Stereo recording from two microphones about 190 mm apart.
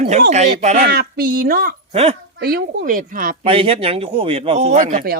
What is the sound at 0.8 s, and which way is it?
Speech, 55° right (ahead or behind).